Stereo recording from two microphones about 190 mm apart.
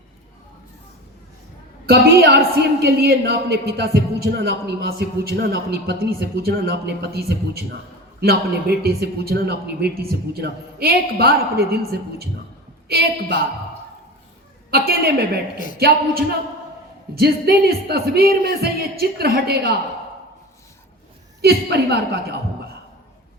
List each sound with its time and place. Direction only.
1.9 s a man's voice: 60° right (ahead or behind)
14.7 s a woman's voice: 55° right (ahead or behind)
15.5 s speech: 45° left (ahead or behind)
17.2 s a man's voice: 55° right (ahead or behind)
21.4 s a man's voice: 55° right (ahead or behind)